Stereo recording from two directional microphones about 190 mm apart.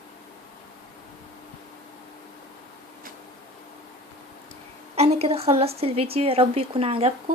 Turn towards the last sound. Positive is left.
turn(degrees=-30)  # may be behind; listen again after turning